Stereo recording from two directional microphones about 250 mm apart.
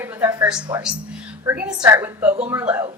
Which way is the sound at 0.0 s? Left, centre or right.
Centre.